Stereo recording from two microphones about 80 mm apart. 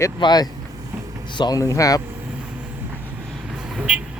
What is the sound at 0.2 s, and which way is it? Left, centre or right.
Speech, left.